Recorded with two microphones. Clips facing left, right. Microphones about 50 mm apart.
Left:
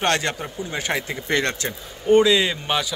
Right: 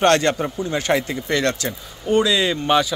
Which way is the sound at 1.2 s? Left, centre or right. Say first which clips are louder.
Right 2 dB; left.